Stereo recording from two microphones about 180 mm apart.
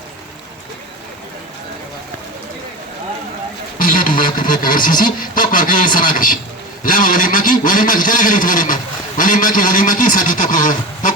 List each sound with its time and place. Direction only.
3.8 s a man's voice: 50° left (ahead or behind)